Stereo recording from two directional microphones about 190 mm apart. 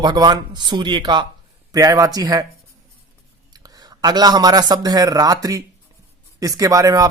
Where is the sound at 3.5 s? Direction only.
20° right (ahead or behind).